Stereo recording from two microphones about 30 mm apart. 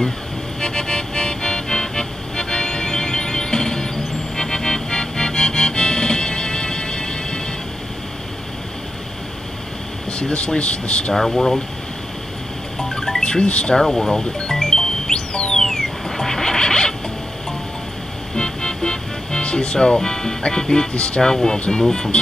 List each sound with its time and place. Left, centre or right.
0.6 s music: left
10.3 s speech: left
11.1 s speech: centre
12.7 s music: centre
13.2 s speech: left
13.7 s speech: centre
14.7 s music: centre
15.1 s music: left
15.7 s a sound: centre
18.3 s music: left
19.4 s speech: left
20.9 s speech: left
21.2 s speech: left